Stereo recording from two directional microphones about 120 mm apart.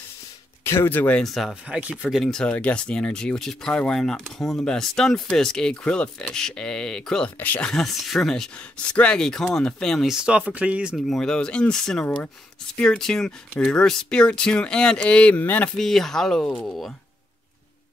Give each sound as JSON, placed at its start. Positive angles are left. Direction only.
{"t": 0.7, "sound": "speech", "side_deg": 20}
{"t": 1.2, "sound": "speech", "side_deg": 0}
{"t": 2.0, "sound": "speech", "side_deg": 5}
{"t": 7.7, "sound": "speech", "side_deg": 0}
{"t": 11.1, "sound": "speech", "side_deg": 5}
{"t": 15.7, "sound": "speech", "side_deg": 0}